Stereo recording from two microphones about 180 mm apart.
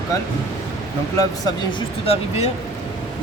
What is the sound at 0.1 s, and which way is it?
Speech, 20° left (ahead or behind).